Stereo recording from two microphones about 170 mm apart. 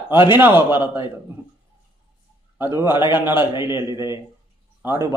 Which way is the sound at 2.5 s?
15° right (ahead or behind).